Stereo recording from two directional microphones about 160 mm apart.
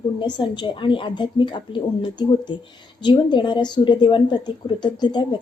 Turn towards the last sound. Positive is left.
turn(degrees=30)  # may be behind; listen again after turning